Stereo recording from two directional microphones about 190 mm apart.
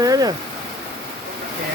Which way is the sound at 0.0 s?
20° right (ahead or behind).